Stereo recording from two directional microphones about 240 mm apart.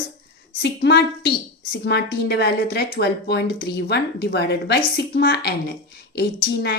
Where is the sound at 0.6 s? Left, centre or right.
Left.